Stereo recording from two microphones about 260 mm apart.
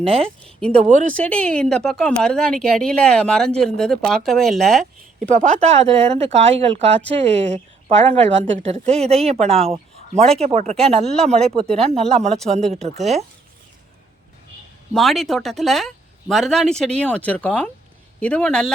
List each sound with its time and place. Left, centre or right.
0.0 s a woman's voice: right
1.0 s speech: centre
5.3 s a woman's voice: right
11.0 s speech: centre
11.3 s a woman's voice: right
14.9 s speech: centre